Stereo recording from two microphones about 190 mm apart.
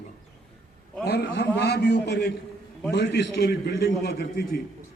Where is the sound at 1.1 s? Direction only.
60° left (ahead or behind).